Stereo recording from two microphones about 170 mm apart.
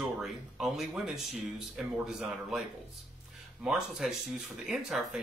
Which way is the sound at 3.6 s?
Centre (ahead or behind).